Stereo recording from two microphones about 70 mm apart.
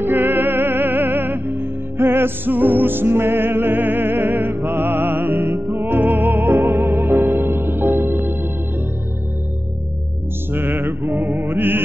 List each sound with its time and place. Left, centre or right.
0.0 s music: right
10.5 s music: right
11.1 s mantra: centre
11.5 s music: right